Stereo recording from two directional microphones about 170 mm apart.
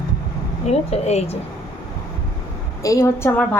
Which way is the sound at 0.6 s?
40° left (ahead or behind).